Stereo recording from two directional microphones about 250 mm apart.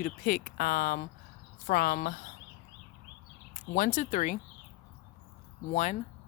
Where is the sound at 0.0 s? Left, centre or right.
Left.